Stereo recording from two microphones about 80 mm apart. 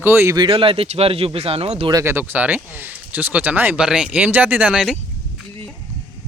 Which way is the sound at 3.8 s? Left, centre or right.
Centre.